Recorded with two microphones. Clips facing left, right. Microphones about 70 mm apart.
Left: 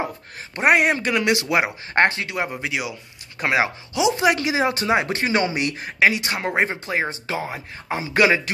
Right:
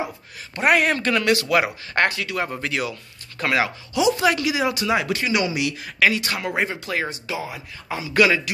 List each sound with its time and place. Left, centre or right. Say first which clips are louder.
0.6 s speech: left 1 dB; left